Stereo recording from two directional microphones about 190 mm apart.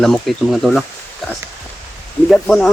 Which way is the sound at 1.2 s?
Centre (ahead or behind).